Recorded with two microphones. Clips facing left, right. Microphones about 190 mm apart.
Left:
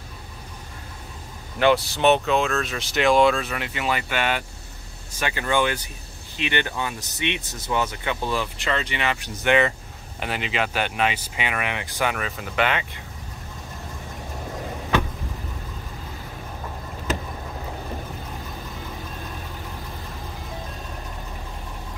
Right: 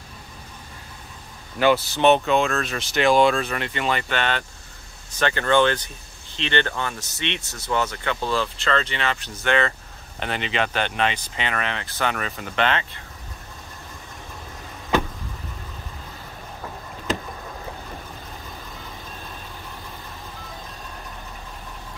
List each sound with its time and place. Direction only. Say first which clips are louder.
1.6 s speech: right 1 dB; centre (ahead or behind)